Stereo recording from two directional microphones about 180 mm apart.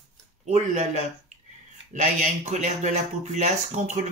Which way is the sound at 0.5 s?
40° right (ahead or behind).